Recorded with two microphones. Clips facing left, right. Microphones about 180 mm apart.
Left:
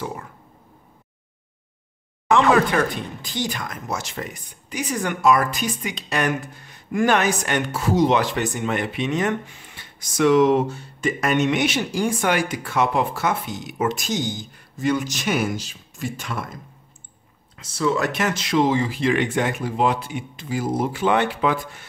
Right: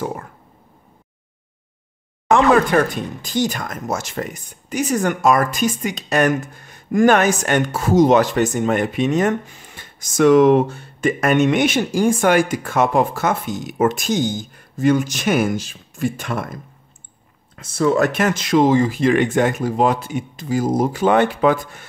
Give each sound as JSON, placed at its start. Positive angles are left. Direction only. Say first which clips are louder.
{"t": 0.0, "sound": "a sound", "louder": "right 5 dB", "side_deg": -50}
{"t": 2.5, "sound": "speech", "louder": "right 4 dB", "side_deg": -45}
{"t": 17.6, "sound": "speech", "louder": "right 5 dB", "side_deg": -50}